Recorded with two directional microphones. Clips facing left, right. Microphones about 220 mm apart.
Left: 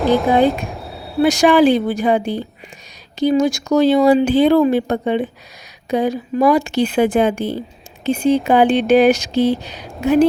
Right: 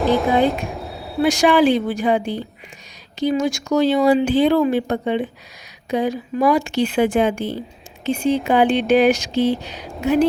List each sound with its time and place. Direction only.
0.0 s speech: centre (ahead or behind)
1.2 s speech: 40° left (ahead or behind)